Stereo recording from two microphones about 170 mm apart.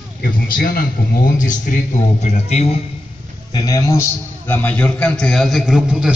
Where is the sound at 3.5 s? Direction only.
20° left (ahead or behind).